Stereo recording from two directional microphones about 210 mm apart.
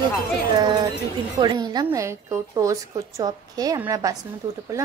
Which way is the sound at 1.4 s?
20° right (ahead or behind).